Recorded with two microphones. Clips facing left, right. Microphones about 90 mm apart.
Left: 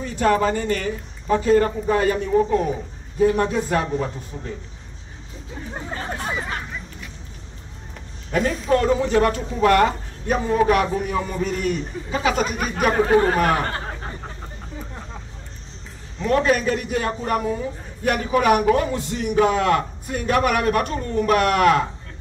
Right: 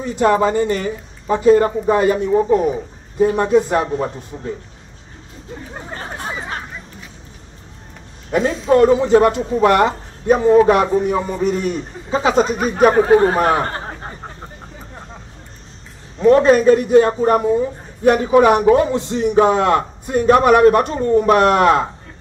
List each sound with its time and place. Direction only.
0.0 s a man's voice: 20° right (ahead or behind)
8.3 s a man's voice: 25° right (ahead or behind)
16.2 s a man's voice: 30° right (ahead or behind)